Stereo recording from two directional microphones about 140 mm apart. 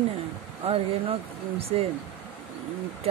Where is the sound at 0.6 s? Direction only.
45° right (ahead or behind).